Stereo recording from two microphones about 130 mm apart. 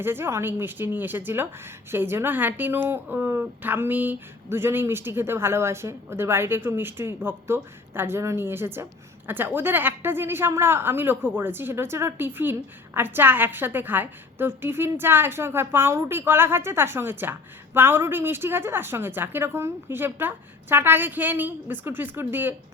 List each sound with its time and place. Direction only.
0.0 s a woman's voice: 15° right (ahead or behind)